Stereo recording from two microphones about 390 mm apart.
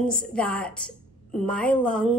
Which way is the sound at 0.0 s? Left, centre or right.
Centre.